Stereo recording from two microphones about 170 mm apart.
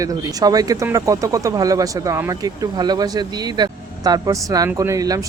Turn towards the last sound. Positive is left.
turn(degrees=-20)  # may be behind; listen again after turning